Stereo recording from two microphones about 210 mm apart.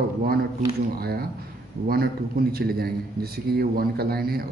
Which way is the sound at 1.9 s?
45° right (ahead or behind).